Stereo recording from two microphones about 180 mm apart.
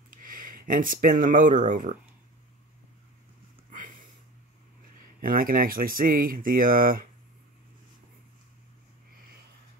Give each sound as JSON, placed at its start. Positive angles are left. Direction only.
{"t": 0.1, "sound": "speech", "side_deg": -50}
{"t": 5.2, "sound": "speech", "side_deg": -50}